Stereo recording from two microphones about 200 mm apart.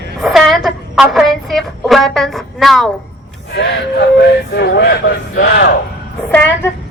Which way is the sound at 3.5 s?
60° left (ahead or behind).